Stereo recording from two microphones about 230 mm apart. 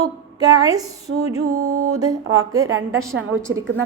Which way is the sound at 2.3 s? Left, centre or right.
Centre.